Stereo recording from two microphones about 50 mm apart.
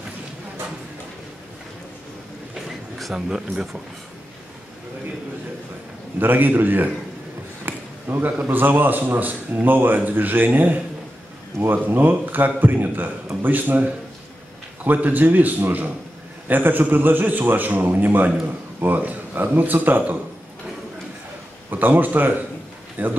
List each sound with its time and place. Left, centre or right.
2.5 s a sound: centre
3.2 s speech: centre
6.1 s a man's voice: right
11.8 s a man's voice: right
21.6 s a man's voice: right